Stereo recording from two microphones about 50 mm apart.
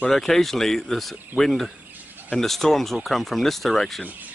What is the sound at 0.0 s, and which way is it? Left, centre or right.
Speech, centre.